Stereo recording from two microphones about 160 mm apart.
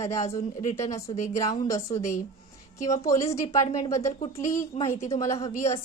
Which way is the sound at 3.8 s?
20° left (ahead or behind).